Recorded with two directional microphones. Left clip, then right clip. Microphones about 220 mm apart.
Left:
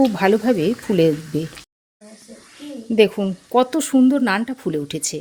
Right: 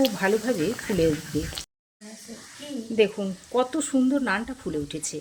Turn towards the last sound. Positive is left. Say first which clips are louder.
# left 7 dB
turn(degrees=45)  # may be behind; listen again after turning